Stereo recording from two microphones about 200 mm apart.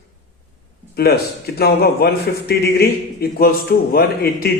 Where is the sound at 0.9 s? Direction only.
55° left (ahead or behind).